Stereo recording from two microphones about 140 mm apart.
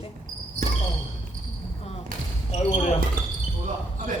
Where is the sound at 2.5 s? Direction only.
55° left (ahead or behind).